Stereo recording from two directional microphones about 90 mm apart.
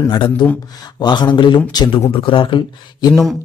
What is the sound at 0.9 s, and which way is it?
Speech, 55° left (ahead or behind).